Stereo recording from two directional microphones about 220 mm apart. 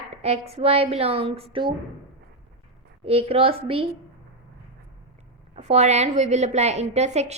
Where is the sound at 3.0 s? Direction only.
25° right (ahead or behind).